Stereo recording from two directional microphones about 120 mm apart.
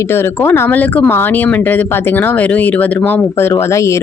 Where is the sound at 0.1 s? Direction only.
20° left (ahead or behind).